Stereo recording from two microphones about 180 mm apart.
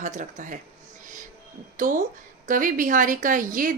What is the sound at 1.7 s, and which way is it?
A woman's voice, 45° right (ahead or behind).